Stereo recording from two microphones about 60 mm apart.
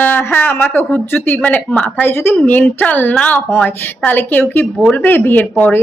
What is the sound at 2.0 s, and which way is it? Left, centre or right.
A woman's voice, left.